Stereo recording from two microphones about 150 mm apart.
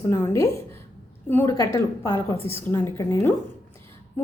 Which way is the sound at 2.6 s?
15° left (ahead or behind).